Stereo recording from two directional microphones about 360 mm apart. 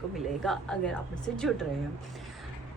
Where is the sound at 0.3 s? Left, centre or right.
Centre.